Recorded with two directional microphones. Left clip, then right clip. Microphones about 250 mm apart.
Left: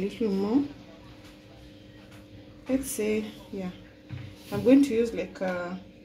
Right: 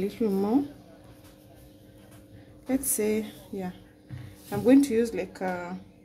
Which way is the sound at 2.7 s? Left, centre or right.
Centre.